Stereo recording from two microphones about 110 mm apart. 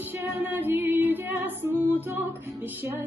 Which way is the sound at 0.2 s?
20° right (ahead or behind).